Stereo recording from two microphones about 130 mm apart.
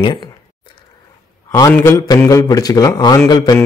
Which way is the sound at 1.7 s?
20° left (ahead or behind).